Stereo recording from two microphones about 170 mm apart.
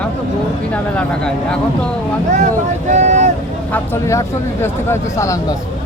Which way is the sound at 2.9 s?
45° right (ahead or behind).